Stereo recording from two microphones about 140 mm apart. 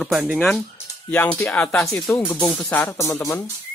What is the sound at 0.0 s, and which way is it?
Speech, 5° right (ahead or behind).